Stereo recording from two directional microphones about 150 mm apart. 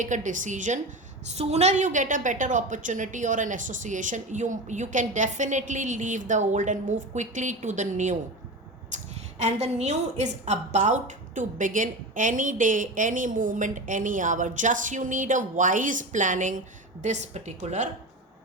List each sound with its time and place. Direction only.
0.0 s a woman's voice: 55° right (ahead or behind)
8.9 s a sound: 55° right (ahead or behind)
9.4 s a woman's voice: 45° right (ahead or behind)